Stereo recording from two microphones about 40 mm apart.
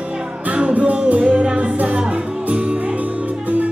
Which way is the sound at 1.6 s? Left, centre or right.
Right.